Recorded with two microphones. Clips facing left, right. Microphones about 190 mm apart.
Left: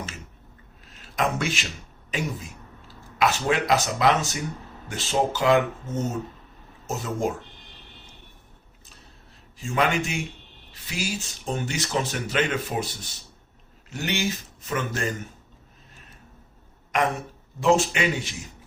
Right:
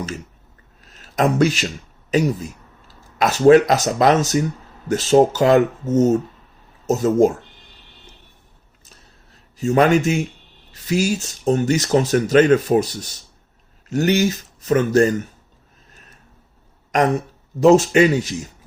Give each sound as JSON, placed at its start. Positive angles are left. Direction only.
{"t": 0.9, "sound": "speech", "side_deg": -40}
{"t": 9.6, "sound": "speech", "side_deg": -40}
{"t": 16.9, "sound": "speech", "side_deg": -40}